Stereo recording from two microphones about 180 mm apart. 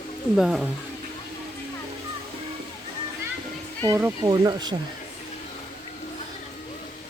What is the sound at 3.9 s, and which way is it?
Speech, 15° right (ahead or behind).